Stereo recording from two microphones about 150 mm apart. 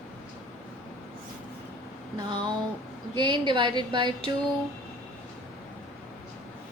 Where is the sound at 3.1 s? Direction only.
30° right (ahead or behind).